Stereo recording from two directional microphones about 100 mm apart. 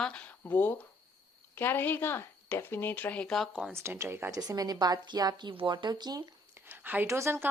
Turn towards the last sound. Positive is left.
turn(degrees=-25)  # may be behind; listen again after turning